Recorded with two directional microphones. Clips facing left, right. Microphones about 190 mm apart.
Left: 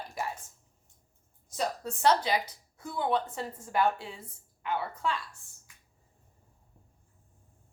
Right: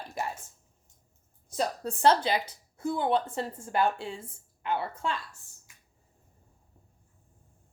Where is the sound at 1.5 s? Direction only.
35° right (ahead or behind).